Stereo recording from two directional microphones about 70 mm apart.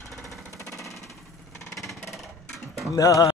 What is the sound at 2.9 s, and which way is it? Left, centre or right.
Speech, left.